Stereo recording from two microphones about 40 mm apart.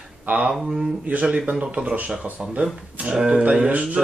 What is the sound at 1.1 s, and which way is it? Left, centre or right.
Speech, right.